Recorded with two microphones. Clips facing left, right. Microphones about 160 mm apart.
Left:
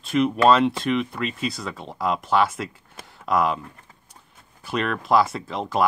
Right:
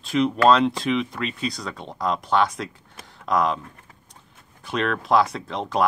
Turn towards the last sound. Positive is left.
turn(degrees=0)  # may be behind; listen again after turning